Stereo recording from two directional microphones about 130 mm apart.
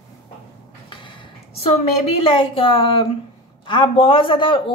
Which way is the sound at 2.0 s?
45° left (ahead or behind).